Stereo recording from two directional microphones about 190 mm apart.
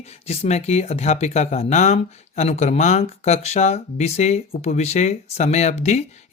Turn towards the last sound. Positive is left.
turn(degrees=35)  # may be behind; listen again after turning